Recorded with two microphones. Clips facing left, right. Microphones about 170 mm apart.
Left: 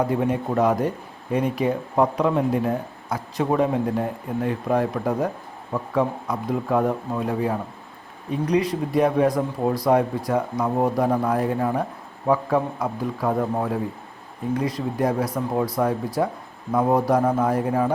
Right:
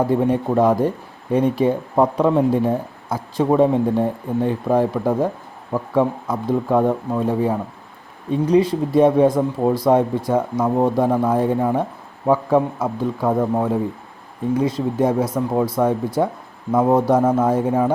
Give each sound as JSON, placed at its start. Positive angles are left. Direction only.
{"t": 0.0, "sound": "a man's voice", "side_deg": -30}